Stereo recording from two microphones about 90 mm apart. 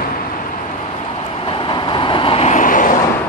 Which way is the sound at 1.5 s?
65° left (ahead or behind).